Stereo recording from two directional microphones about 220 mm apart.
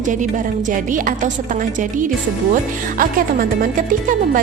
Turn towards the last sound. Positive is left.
turn(degrees=-35)  # may be behind; listen again after turning